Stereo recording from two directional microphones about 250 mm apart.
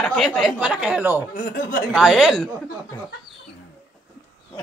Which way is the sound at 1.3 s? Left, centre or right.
Left.